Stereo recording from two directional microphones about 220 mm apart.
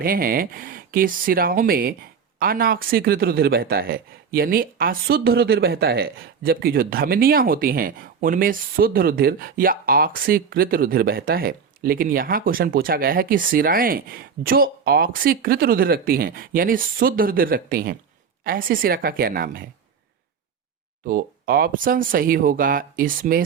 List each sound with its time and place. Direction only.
0.0 s speech: 40° right (ahead or behind)
21.1 s speech: 40° right (ahead or behind)